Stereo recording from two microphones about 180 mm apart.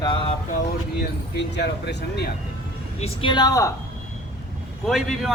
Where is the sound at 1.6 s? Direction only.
70° left (ahead or behind).